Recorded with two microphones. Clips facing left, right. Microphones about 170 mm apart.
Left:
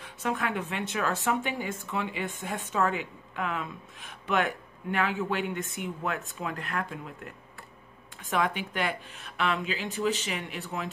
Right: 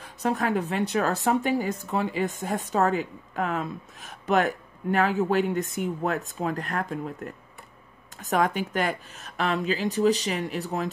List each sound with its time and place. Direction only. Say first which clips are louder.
0.0 s speech: right 5 dB; 40° right (ahead or behind)